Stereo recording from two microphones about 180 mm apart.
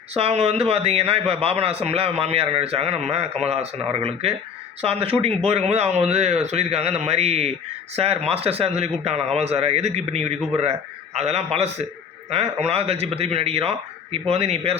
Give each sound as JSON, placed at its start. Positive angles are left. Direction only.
{"t": 0.2, "sound": "a man's voice", "side_deg": -35}